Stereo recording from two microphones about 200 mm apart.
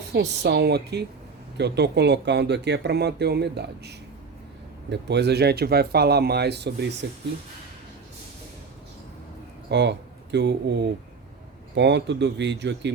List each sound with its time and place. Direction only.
0.1 s speech: 55° right (ahead or behind)
9.6 s speech: 60° right (ahead or behind)